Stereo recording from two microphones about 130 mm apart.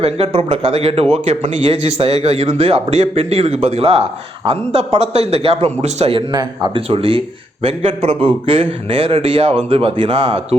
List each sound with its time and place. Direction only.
0.0 s speech: 50° right (ahead or behind)
6.3 s speech: 30° right (ahead or behind)
6.8 s speech: 45° right (ahead or behind)